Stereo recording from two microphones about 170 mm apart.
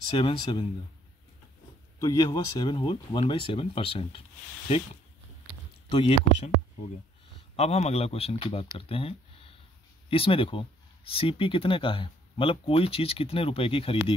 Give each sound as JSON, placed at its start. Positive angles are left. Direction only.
{"t": 0.1, "sound": "speech", "side_deg": 30}
{"t": 2.0, "sound": "speech", "side_deg": 20}
{"t": 5.9, "sound": "speech", "side_deg": 30}
{"t": 7.5, "sound": "speech", "side_deg": 40}